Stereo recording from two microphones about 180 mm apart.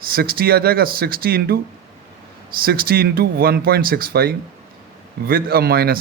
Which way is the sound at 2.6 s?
55° right (ahead or behind).